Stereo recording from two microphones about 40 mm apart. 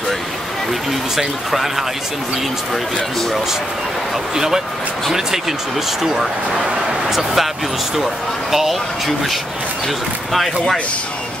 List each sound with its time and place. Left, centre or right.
1.1 s speech: centre
6.1 s speech: centre